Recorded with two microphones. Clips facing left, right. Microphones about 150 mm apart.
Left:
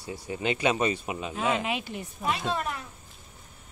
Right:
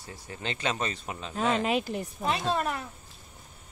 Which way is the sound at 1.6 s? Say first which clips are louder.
Right 4 dB; 40° right (ahead or behind).